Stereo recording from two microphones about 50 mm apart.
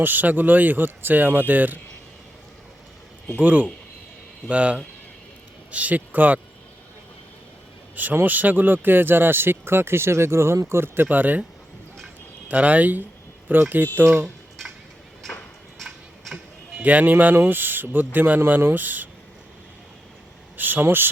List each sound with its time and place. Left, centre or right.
0.0 s a man's voice: right
3.3 s a man's voice: right
8.1 s speech: right
12.5 s a man's voice: right
16.7 s a man's voice: right
20.6 s speech: right